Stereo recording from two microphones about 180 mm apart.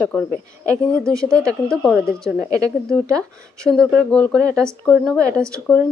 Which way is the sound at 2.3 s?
15° right (ahead or behind).